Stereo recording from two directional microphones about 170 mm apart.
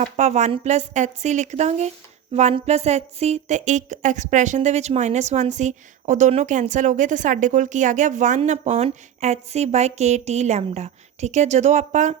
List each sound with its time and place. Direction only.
0.2 s speech: 40° right (ahead or behind)